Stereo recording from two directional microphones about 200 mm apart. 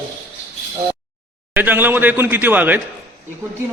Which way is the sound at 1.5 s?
10° right (ahead or behind).